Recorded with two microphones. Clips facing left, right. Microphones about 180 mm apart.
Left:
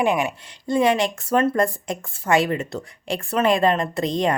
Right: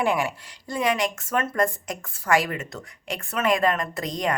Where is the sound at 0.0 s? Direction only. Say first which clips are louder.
Left 3 dB; 20° left (ahead or behind).